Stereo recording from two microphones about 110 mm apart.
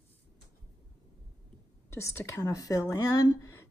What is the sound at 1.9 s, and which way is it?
Speech, 25° left (ahead or behind).